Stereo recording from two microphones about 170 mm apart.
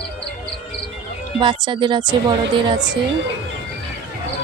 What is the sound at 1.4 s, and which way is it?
Speech, 25° right (ahead or behind).